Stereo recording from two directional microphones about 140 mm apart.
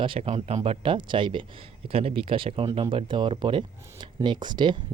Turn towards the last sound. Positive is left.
turn(degrees=-35)  # may be behind; listen again after turning